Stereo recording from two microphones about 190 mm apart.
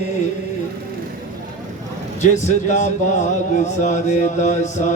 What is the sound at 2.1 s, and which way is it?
Speech, 40° left (ahead or behind).